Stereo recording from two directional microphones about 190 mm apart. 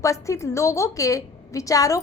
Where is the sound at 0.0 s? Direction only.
15° left (ahead or behind).